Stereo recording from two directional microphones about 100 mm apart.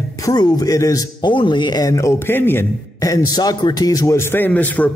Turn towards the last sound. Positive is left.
turn(degrees=15)  # may be behind; listen again after turning